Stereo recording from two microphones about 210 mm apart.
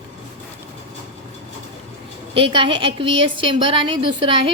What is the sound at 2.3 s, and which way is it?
A woman's voice, 25° right (ahead or behind).